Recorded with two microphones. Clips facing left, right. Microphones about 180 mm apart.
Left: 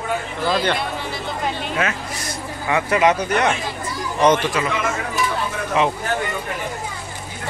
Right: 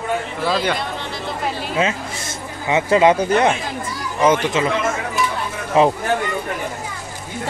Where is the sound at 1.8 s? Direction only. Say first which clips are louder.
Right 6 dB; 25° right (ahead or behind).